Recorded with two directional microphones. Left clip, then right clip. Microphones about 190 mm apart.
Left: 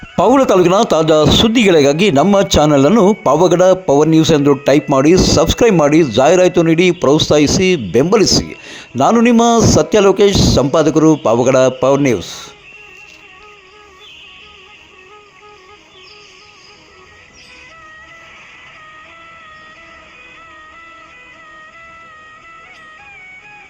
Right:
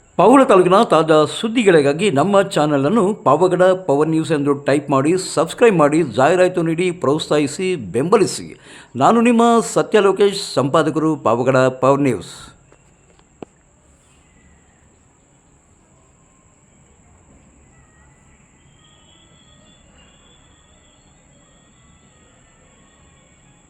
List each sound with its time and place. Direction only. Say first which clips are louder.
0.2 s a man's voice: left 1 dB; 35° left (ahead or behind); by 12.5 s 15° left (ahead or behind)